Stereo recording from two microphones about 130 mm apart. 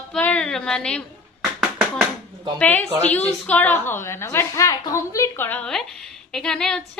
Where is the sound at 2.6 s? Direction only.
10° left (ahead or behind).